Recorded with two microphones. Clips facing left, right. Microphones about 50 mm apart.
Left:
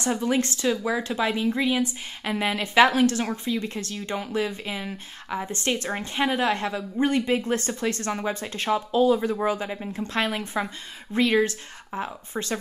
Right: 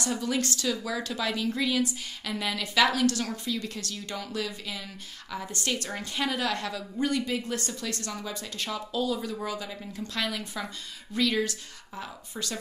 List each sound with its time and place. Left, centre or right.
0.0 s speech: left